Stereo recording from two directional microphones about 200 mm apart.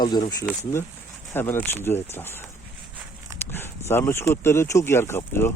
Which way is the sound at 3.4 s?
10° left (ahead or behind).